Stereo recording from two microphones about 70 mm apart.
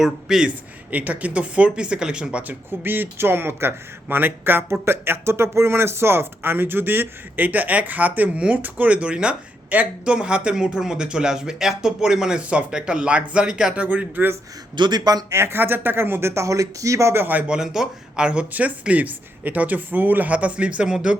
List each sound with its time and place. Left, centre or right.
0.0 s speech: centre
0.9 s speech: right
2.5 s speech: right; by 13.8 s centre
13.8 s speech: right
14.8 s a man's voice: right
15.3 s speech: right
17.5 s speech: centre